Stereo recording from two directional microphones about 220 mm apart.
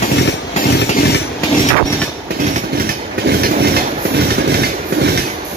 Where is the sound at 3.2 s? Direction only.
45° right (ahead or behind).